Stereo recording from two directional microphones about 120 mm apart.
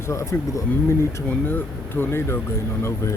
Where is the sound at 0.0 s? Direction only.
25° left (ahead or behind).